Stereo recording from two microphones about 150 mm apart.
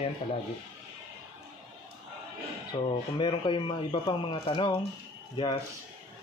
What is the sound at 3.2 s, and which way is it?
Speech, 35° left (ahead or behind).